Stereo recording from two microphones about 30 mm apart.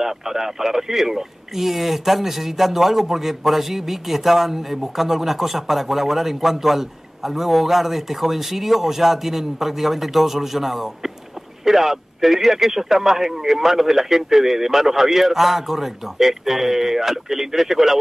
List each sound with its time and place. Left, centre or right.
0.0 s speech: centre